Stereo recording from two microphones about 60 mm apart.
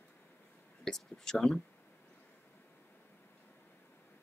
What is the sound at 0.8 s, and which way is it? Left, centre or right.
Speech, centre.